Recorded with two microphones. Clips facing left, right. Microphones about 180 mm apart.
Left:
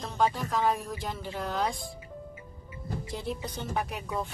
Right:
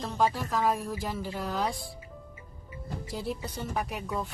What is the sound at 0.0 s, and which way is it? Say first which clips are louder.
Speech: even; centre (ahead or behind).